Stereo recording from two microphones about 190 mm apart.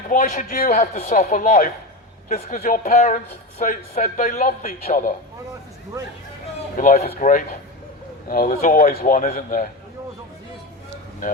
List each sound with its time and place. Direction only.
0.1 s a man's voice: 45° left (ahead or behind)
6.7 s a man's voice: 40° left (ahead or behind)